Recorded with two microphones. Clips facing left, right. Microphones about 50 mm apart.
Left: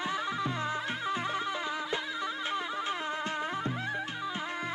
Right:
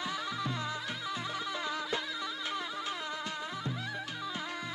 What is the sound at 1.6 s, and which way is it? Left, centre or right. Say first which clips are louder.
Music: left 2 dB; centre.